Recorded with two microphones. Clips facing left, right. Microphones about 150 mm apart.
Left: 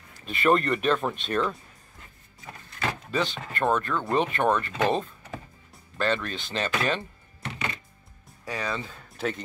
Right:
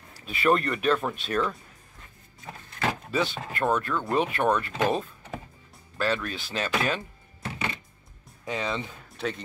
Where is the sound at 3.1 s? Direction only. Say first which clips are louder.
Right 1 dB; 10° right (ahead or behind).